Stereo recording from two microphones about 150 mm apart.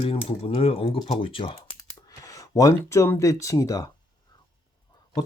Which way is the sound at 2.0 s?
25° left (ahead or behind).